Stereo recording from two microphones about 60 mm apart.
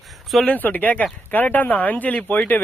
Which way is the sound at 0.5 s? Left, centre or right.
Left.